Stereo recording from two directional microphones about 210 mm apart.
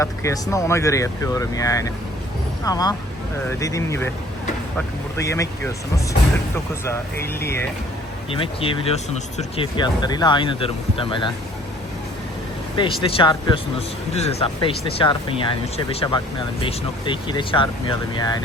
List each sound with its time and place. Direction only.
0.0 s speech: 15° left (ahead or behind)
5.2 s speech: 15° left (ahead or behind)
6.8 s speech: 10° left (ahead or behind)
8.4 s speech: 25° left (ahead or behind)
12.7 s speech: 25° left (ahead or behind)